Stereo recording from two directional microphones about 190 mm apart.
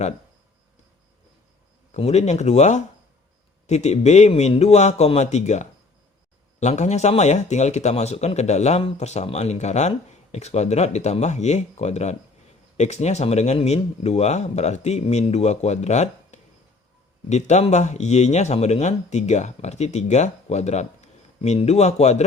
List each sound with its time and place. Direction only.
1.9 s speech: 35° left (ahead or behind)